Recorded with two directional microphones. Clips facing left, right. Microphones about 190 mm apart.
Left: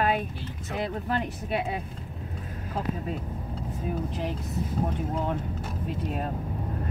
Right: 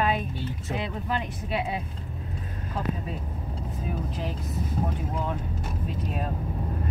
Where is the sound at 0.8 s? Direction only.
50° left (ahead or behind).